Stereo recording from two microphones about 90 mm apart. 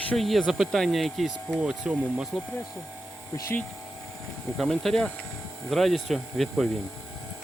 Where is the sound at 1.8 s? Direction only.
15° right (ahead or behind).